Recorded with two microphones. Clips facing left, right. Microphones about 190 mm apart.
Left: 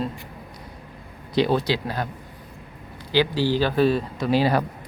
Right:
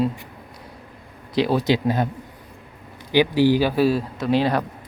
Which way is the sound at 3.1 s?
15° right (ahead or behind).